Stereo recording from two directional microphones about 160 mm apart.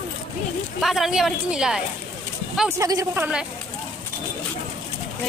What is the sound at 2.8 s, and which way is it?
Speech, 20° right (ahead or behind).